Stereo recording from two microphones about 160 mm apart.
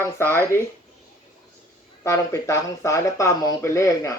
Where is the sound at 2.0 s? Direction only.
20° left (ahead or behind).